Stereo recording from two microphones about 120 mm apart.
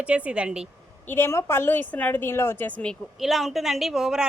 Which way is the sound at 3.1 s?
Centre (ahead or behind).